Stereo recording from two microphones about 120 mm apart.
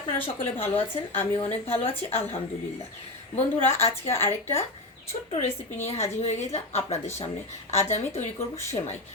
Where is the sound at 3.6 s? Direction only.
55° left (ahead or behind).